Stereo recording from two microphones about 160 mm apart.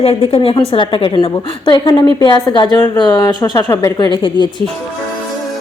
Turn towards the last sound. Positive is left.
turn(degrees=30)  # may be behind; listen again after turning